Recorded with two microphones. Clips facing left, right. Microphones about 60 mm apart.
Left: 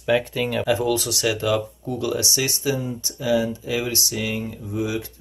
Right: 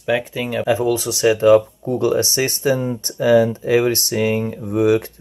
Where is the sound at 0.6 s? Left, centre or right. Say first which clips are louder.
Right 5 dB; right.